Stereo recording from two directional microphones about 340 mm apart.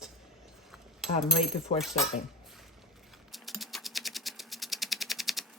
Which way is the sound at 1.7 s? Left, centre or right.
Centre.